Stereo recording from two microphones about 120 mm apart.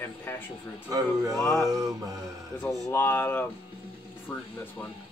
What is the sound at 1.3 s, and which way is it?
Speech, 25° left (ahead or behind).